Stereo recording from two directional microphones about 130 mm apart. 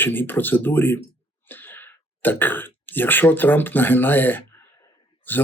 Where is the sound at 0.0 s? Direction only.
15° left (ahead or behind).